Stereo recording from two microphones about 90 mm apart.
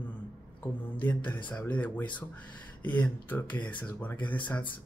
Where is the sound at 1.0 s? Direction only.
20° left (ahead or behind).